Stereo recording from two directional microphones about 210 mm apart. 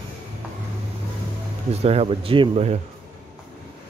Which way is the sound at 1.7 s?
30° right (ahead or behind).